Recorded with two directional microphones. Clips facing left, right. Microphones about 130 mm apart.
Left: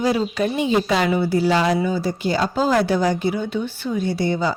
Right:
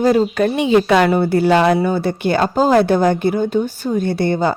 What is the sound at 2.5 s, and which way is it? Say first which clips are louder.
A woman's voice: right 6 dB; 45° right (ahead or behind).